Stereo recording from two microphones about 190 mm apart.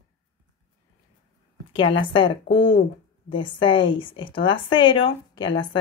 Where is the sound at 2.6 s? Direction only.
70° left (ahead or behind).